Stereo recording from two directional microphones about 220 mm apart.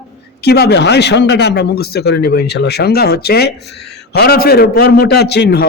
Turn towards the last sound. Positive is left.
turn(degrees=45)  # may be behind; listen again after turning